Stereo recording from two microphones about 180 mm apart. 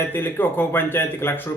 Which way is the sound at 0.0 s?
10° left (ahead or behind).